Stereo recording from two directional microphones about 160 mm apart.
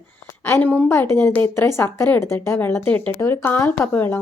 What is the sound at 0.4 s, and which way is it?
Speech, 10° left (ahead or behind).